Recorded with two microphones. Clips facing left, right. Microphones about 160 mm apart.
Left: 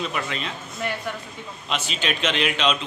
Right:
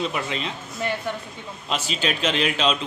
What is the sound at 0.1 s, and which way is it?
Speech, 25° right (ahead or behind).